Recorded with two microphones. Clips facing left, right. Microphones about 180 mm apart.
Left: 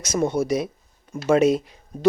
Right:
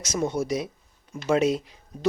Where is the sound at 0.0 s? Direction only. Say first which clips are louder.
Left 4 dB; 55° left (ahead or behind).